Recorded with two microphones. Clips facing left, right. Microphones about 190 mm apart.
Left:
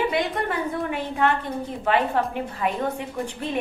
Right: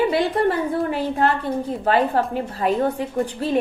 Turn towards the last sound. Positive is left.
turn(degrees=-35)  # may be behind; listen again after turning